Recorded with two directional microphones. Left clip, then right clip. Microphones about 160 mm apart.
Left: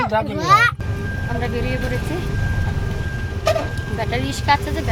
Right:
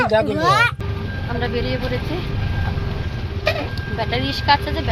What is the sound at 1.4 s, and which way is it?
Speech, 15° left (ahead or behind).